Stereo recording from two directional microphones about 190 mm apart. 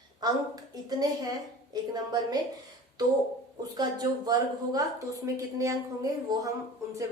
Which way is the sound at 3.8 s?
20° right (ahead or behind).